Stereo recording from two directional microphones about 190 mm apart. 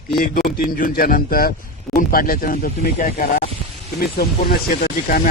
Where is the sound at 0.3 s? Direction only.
50° left (ahead or behind).